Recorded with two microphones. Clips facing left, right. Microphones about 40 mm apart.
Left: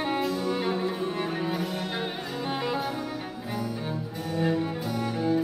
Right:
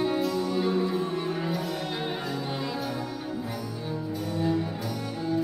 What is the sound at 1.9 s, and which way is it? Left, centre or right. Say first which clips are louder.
Music: right 1 dB; centre.